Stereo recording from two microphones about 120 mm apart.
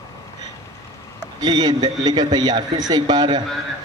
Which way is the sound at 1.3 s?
35° right (ahead or behind).